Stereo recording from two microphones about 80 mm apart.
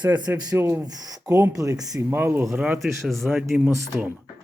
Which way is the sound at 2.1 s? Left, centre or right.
Right.